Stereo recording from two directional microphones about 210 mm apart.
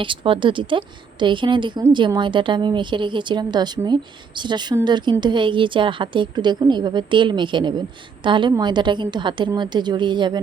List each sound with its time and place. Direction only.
0.0 s speech: 25° right (ahead or behind)